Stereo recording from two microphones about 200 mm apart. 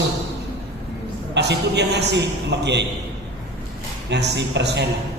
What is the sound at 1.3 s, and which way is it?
A man's voice, 55° right (ahead or behind).